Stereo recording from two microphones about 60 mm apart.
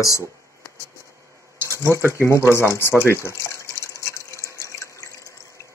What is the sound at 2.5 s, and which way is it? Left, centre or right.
Water, left.